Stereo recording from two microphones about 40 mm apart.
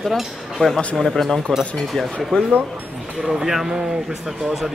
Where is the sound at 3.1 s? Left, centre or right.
Centre.